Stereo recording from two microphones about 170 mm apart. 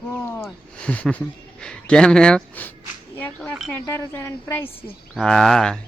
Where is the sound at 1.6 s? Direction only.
5° left (ahead or behind).